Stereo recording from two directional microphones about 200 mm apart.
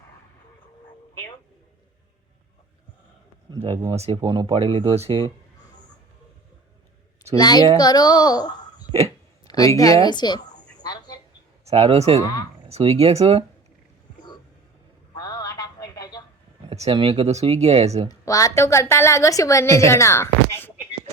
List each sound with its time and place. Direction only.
3.9 s speech: 30° right (ahead or behind)
7.3 s a child's voice: 20° left (ahead or behind)
8.9 s a sound: 30° right (ahead or behind)
9.5 s a woman's voice: 15° left (ahead or behind)
10.8 s a sound: 20° left (ahead or behind)
11.6 s speech: 30° right (ahead or behind)
15.1 s a sound: 20° left (ahead or behind)
16.6 s speech: 30° right (ahead or behind)
18.1 s a woman's voice: 15° left (ahead or behind)